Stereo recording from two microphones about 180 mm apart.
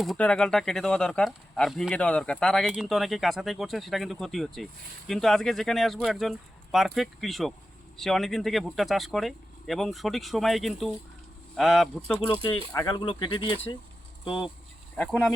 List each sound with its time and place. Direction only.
0.0 s speech: 5° left (ahead or behind); by 13.7 s 25° left (ahead or behind)
14.9 s speech: 5° left (ahead or behind)